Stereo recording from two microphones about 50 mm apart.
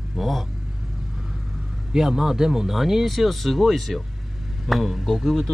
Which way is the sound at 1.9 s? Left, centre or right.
Centre.